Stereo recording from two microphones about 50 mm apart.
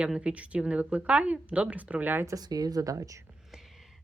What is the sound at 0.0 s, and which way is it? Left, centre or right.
A woman's voice, right.